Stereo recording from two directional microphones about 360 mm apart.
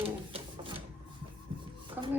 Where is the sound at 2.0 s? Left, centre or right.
Centre.